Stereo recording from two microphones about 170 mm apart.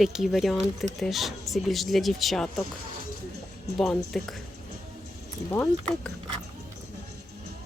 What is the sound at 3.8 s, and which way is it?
Speech, 5° left (ahead or behind).